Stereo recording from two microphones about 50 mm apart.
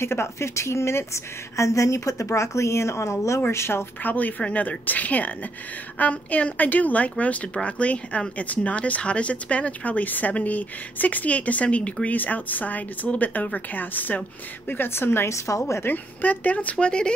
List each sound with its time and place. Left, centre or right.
0.0 s a woman's voice: left
3.4 s a woman's voice: left
4.0 s speech: left
14.7 s a woman's voice: left
15.2 s speech: left
15.8 s speech: left
16.7 s speech: centre